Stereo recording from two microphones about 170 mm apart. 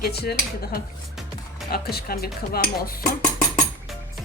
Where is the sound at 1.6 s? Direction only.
65° left (ahead or behind).